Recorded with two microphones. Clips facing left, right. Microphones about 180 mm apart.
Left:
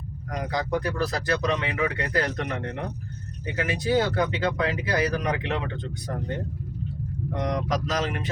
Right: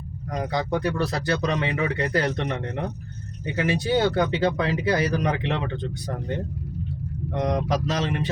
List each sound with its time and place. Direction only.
0.3 s speech: 30° right (ahead or behind)
7.4 s speech: 30° right (ahead or behind)